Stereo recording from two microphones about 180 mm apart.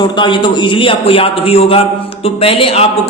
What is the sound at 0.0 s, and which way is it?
A man's voice, 25° left (ahead or behind).